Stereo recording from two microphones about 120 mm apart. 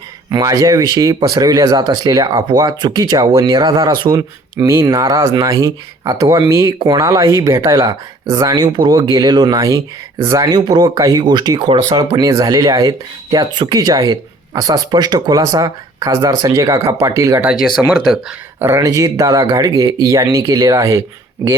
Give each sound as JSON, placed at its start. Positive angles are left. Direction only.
{"t": 0.3, "sound": "speech", "side_deg": -30}
{"t": 4.5, "sound": "speech", "side_deg": -25}
{"t": 17.4, "sound": "speech", "side_deg": -10}
{"t": 18.6, "sound": "speech", "side_deg": -25}